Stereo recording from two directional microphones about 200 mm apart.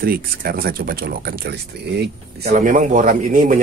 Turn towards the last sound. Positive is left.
turn(degrees=-40)  # may be behind; listen again after turning